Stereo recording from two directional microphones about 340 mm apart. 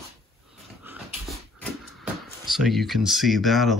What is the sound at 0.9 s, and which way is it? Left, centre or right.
Dog, centre.